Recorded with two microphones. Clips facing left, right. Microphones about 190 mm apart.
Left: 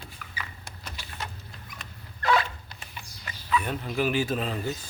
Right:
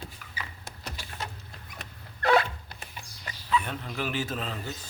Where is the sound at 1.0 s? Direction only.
45° right (ahead or behind).